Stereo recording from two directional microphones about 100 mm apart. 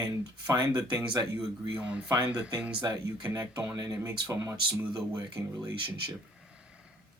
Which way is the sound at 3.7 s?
35° right (ahead or behind).